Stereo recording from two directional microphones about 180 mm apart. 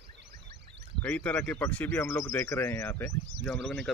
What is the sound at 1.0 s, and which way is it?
A man's voice, 5° left (ahead or behind).